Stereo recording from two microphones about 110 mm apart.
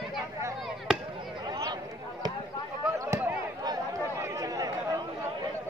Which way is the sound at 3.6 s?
35° right (ahead or behind).